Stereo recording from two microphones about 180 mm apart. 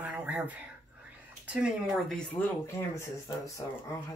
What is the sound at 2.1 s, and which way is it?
Speech, 15° left (ahead or behind).